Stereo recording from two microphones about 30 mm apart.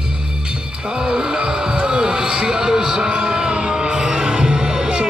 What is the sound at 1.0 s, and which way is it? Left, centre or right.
Heart sounds, right.